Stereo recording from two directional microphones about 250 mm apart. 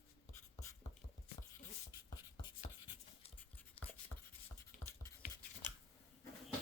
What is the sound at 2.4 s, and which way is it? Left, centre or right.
Writing, centre.